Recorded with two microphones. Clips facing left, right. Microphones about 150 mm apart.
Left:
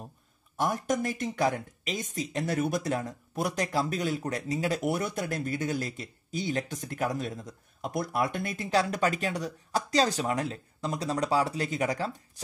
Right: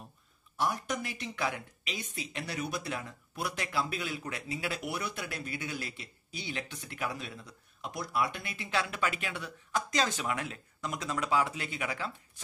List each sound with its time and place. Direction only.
0.6 s speech: 45° left (ahead or behind)